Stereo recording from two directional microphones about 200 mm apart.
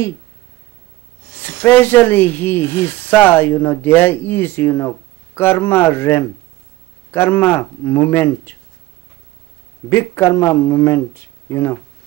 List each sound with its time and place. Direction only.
1.4 s speech: 10° left (ahead or behind)
9.8 s speech: 10° left (ahead or behind)